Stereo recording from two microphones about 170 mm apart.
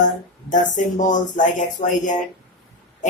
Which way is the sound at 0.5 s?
50° left (ahead or behind).